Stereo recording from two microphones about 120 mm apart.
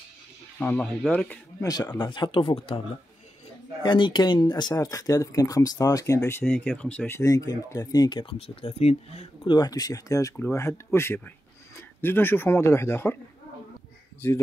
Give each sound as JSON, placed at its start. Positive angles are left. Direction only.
{"t": 0.6, "sound": "speech", "side_deg": 10}
{"t": 1.6, "sound": "speech", "side_deg": 30}
{"t": 2.0, "sound": "speech", "side_deg": 40}
{"t": 3.8, "sound": "speech", "side_deg": 40}
{"t": 9.6, "sound": "speech", "side_deg": 30}